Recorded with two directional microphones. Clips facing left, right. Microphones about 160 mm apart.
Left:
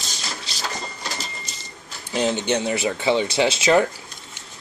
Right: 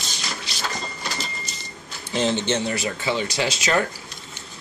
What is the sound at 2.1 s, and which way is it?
Speech, 10° left (ahead or behind).